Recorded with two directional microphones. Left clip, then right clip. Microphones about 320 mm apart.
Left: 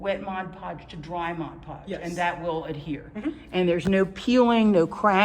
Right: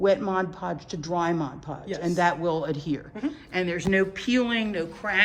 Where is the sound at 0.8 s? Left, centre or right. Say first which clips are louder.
Right 5 dB; centre.